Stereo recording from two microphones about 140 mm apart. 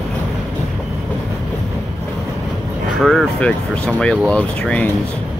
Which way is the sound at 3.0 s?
5° left (ahead or behind).